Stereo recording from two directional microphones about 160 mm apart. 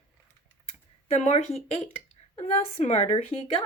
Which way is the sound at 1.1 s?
40° left (ahead or behind).